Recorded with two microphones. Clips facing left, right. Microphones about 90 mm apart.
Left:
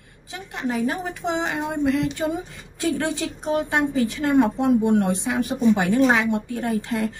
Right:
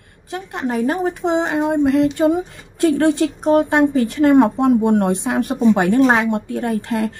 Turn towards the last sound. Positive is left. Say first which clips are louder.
# right 4 dB
turn(degrees=-50)  # may be behind; listen again after turning